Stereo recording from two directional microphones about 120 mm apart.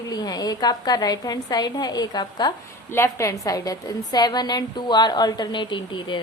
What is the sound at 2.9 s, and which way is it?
Speech, 25° left (ahead or behind).